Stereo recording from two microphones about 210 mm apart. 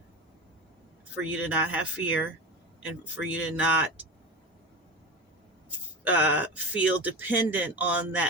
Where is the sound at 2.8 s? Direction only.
5° right (ahead or behind).